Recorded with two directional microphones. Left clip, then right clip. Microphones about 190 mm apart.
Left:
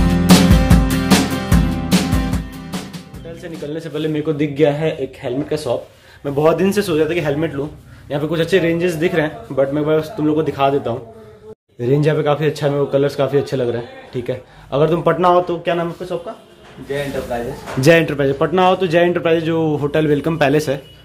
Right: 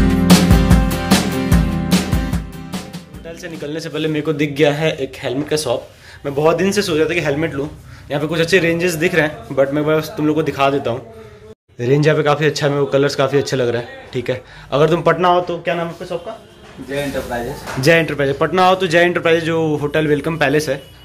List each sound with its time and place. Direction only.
0.3 s music: centre (ahead or behind)
3.4 s a man's voice: 5° left (ahead or behind)
6.2 s a man's voice: 25° left (ahead or behind); by 15.1 s 5° left (ahead or behind)
15.1 s a man's voice: 25° left (ahead or behind)
17.7 s a man's voice: 30° left (ahead or behind)